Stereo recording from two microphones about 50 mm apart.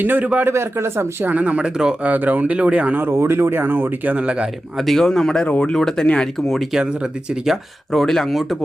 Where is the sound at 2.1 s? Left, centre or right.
Right.